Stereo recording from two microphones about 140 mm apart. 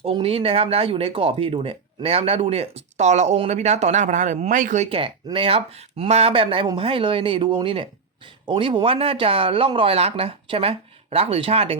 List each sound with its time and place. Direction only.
0.0 s speech: 40° right (ahead or behind); by 4.9 s 65° right (ahead or behind)
4.9 s speech: 40° right (ahead or behind)